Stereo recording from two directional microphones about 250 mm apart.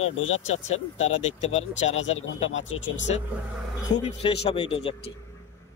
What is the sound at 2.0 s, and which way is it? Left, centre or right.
Speech, left.